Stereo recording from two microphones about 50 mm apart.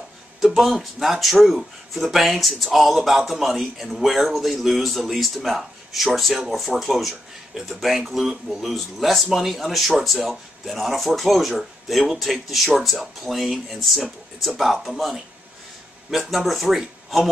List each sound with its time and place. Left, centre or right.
0.4 s speech: centre